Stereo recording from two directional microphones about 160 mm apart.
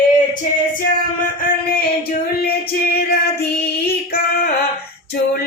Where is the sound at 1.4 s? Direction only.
60° left (ahead or behind).